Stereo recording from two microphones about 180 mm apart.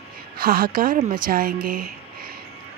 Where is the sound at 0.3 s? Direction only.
55° right (ahead or behind).